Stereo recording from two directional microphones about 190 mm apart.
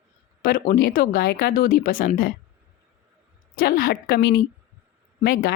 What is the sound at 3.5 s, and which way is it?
Speech, 50° left (ahead or behind).